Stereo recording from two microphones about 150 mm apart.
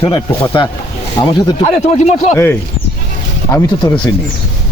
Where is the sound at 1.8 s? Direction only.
50° left (ahead or behind).